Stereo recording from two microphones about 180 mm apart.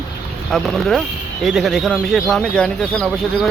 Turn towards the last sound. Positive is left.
turn(degrees=0)  # may be behind; listen again after turning